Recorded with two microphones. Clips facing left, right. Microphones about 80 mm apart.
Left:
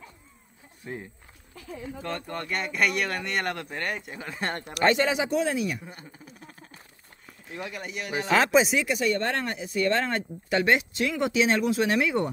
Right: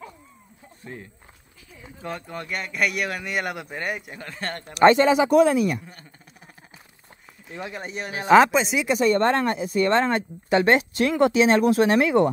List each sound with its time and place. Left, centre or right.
2.0 s speech: centre
4.3 s speech: centre
4.8 s speech: right
5.3 s speech: right
7.5 s speech: right
8.5 s speech: centre
8.8 s speech: right
10.7 s speech: right